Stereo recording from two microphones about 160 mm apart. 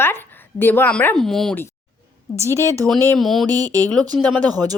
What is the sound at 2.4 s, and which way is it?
Speech, 15° right (ahead or behind).